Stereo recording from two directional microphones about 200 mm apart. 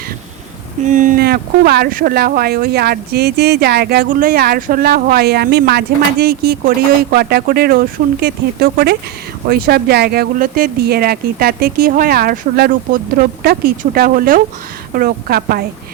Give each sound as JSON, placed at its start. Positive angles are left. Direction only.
{"t": 0.9, "sound": "speech", "side_deg": -40}